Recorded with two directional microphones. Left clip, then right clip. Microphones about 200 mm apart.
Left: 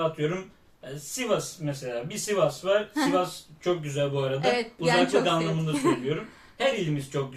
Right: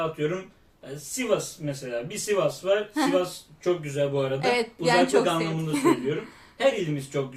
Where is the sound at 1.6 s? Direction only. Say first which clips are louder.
Right 1 dB; 5° right (ahead or behind).